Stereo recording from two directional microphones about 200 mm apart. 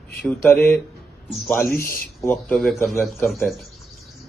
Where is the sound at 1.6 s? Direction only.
45° left (ahead or behind).